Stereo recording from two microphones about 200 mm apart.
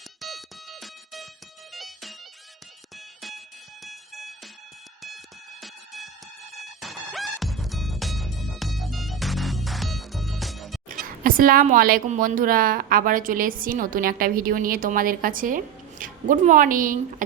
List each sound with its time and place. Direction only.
0.2 s music: centre (ahead or behind)
3.2 s fire alarm: centre (ahead or behind)
3.8 s music: centre (ahead or behind)
5.6 s music: centre (ahead or behind)
10.8 s a woman's voice: 45° right (ahead or behind)